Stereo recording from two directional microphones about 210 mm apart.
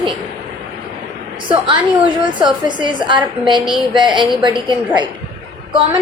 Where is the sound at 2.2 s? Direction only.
20° right (ahead or behind).